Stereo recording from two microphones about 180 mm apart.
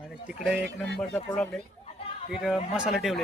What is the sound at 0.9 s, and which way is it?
Speech, 5° left (ahead or behind).